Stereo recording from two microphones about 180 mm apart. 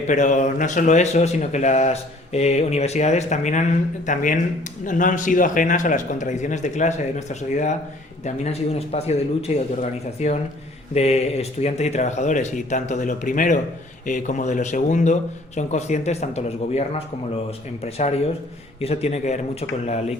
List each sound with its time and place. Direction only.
0.1 s a man's voice: 45° left (ahead or behind)
8.7 s a man's voice: 35° left (ahead or behind)